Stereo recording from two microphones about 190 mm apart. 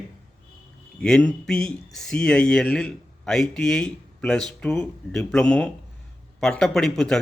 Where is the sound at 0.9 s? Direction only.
5° left (ahead or behind).